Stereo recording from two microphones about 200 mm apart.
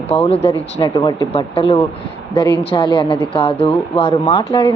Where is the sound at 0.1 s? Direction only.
30° left (ahead or behind).